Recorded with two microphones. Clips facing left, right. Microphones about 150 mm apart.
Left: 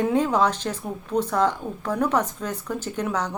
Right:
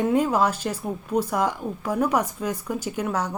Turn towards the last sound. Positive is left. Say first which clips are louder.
# even
turn(degrees=-10)  # may be behind; listen again after turning